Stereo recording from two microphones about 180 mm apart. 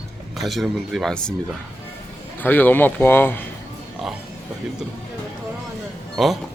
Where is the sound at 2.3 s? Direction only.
10° left (ahead or behind).